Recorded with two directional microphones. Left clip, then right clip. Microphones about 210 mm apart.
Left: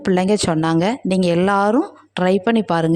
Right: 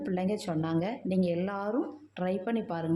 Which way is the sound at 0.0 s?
45° left (ahead or behind).